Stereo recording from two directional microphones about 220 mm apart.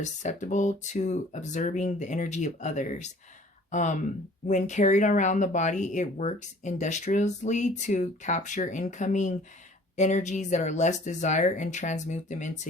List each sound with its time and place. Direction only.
0.0 s speech: 35° left (ahead or behind)